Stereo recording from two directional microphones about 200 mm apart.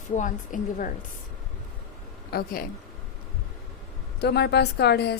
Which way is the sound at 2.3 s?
50° left (ahead or behind).